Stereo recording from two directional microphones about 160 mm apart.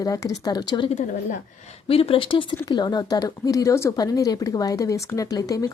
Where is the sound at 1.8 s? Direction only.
35° left (ahead or behind).